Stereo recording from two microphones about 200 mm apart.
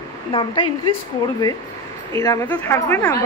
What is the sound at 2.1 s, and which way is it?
Speech, 10° left (ahead or behind).